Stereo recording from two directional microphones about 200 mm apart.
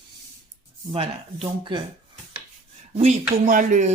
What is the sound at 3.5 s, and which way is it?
Speech, 40° right (ahead or behind).